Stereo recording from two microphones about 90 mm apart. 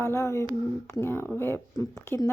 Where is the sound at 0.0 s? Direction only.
30° left (ahead or behind).